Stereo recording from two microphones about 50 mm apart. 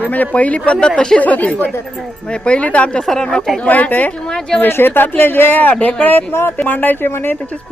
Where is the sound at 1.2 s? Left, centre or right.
Left.